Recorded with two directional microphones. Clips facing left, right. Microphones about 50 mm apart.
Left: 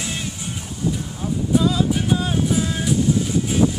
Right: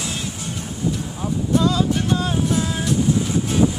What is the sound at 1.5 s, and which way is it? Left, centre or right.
Vehicle, centre.